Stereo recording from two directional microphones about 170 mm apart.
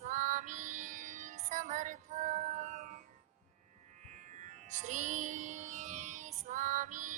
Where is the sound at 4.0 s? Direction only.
45° right (ahead or behind).